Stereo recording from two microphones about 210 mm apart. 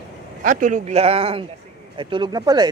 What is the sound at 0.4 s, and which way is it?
Speech, 40° right (ahead or behind).